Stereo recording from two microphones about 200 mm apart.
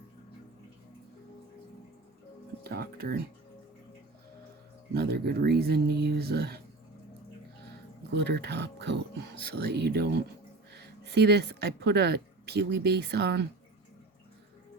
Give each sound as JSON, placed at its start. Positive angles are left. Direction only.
{"t": 2.6, "sound": "speech", "side_deg": -50}
{"t": 4.9, "sound": "speech", "side_deg": -50}
{"t": 8.1, "sound": "speech", "side_deg": -55}